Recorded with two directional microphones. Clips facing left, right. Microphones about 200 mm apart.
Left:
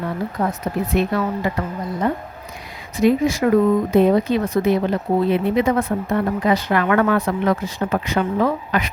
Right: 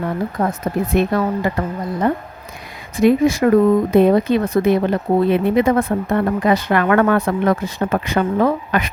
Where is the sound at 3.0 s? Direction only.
50° right (ahead or behind).